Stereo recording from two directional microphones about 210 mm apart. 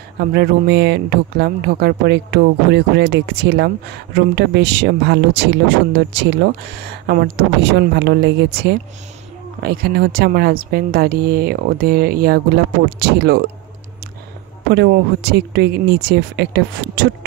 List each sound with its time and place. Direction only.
0.2 s speech: 50° right (ahead or behind)
14.7 s speech: 50° right (ahead or behind)